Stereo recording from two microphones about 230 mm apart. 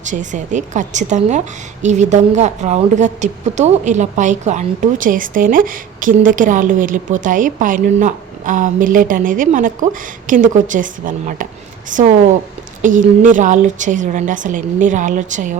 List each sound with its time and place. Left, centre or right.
0.1 s a woman's voice: right